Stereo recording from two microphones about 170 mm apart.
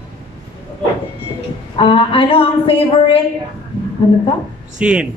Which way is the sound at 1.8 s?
30° left (ahead or behind).